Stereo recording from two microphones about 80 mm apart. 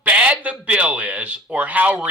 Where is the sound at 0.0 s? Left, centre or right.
Centre.